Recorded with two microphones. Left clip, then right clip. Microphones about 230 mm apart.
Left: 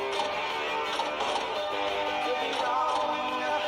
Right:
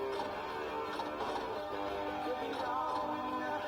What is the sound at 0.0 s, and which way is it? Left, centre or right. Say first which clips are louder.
Music: left 8 dB; left.